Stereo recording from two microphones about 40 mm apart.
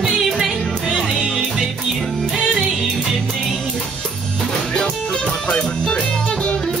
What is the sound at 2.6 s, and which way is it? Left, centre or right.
Music, centre.